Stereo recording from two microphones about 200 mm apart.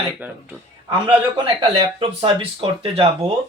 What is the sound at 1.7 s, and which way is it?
Speech, 25° right (ahead or behind).